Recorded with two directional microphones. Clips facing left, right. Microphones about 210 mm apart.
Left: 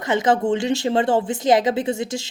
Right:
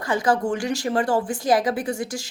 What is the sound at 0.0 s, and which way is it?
Speech, 20° left (ahead or behind).